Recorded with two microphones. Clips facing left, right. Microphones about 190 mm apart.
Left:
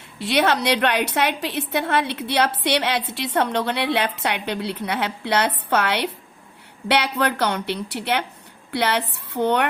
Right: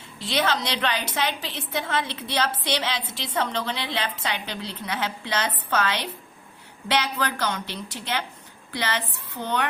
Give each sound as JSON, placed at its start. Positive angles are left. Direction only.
{"t": 0.2, "sound": "a woman's voice", "side_deg": 65}